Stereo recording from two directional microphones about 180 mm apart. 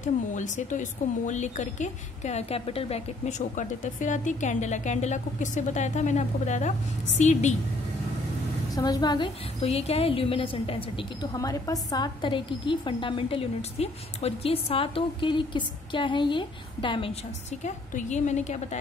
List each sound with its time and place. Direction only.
0.0 s speech: 45° left (ahead or behind)
8.7 s a woman's voice: 20° left (ahead or behind)
11.3 s a woman's voice: 20° left (ahead or behind); by 18.8 s 40° left (ahead or behind)